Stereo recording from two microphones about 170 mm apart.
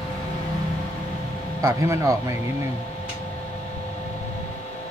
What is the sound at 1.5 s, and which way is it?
Speech, 15° right (ahead or behind).